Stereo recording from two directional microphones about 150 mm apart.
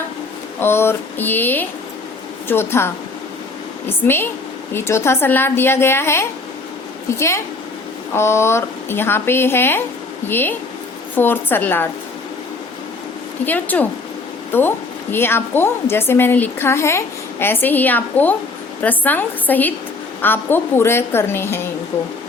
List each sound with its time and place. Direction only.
0.6 s a woman's voice: 15° left (ahead or behind)
13.4 s a woman's voice: 10° left (ahead or behind)